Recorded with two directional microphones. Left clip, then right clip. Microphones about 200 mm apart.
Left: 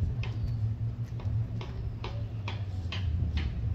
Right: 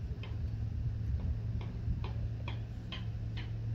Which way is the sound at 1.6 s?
35° right (ahead or behind).